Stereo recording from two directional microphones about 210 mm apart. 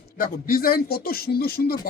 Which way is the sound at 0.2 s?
45° left (ahead or behind).